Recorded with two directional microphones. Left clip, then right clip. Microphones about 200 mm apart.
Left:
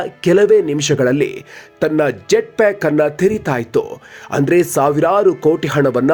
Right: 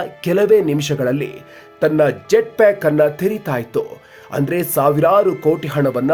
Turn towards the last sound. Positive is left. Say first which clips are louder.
# left 4 dB
turn(degrees=20)  # may be behind; listen again after turning